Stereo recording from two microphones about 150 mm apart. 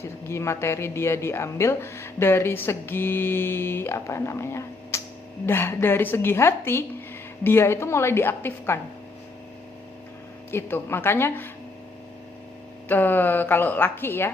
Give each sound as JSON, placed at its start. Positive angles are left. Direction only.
{"t": 0.0, "sound": "a woman's voice", "side_deg": 20}
{"t": 10.5, "sound": "a woman's voice", "side_deg": 15}
{"t": 12.9, "sound": "a woman's voice", "side_deg": 15}